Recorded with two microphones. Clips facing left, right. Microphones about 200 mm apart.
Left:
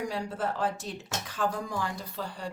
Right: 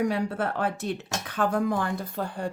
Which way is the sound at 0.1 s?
60° right (ahead or behind).